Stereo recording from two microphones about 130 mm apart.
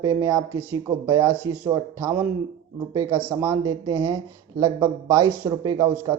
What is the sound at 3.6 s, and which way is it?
Speech, 30° right (ahead or behind).